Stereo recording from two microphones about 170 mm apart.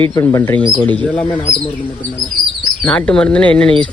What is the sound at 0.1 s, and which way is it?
Speech, 20° left (ahead or behind).